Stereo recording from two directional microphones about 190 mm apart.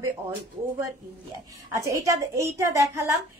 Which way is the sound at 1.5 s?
15° right (ahead or behind).